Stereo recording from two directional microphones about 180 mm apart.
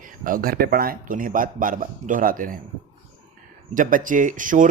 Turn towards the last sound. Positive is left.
turn(degrees=-45)  # may be behind; listen again after turning